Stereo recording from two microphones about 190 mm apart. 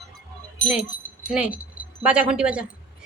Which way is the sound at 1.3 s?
5° right (ahead or behind).